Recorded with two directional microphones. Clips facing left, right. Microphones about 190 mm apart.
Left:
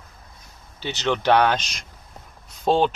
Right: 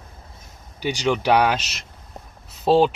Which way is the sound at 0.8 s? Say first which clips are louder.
Right 3 dB; 10° right (ahead or behind).